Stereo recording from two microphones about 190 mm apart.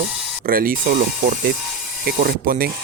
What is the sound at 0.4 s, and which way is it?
Speech, 50° right (ahead or behind).